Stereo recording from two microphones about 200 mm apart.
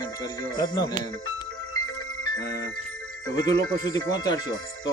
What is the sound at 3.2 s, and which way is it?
Speech, 15° left (ahead or behind).